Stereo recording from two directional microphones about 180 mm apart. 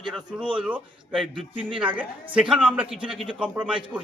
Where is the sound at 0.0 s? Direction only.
5° right (ahead or behind).